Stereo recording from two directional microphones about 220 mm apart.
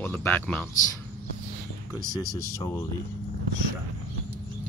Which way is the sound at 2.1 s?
15° left (ahead or behind).